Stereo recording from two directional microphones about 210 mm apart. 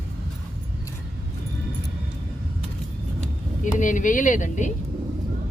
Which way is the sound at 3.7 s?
40° left (ahead or behind).